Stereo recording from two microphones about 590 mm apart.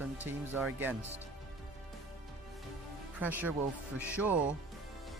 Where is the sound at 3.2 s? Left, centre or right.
Centre.